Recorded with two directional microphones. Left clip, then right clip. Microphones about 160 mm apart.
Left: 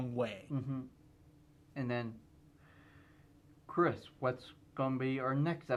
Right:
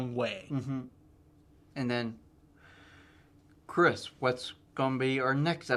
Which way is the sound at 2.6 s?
35° left (ahead or behind).